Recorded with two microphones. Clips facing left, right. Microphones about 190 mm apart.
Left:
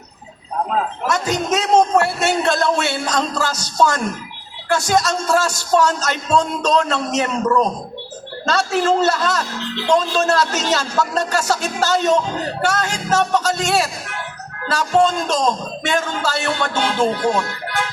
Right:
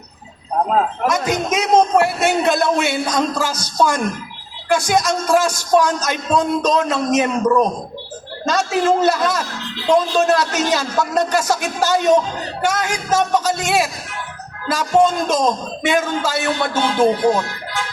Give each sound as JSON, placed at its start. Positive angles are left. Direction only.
{"t": 1.1, "sound": "speech", "side_deg": -15}